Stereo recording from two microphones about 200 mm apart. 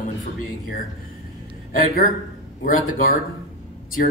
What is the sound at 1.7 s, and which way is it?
Speech, 45° left (ahead or behind).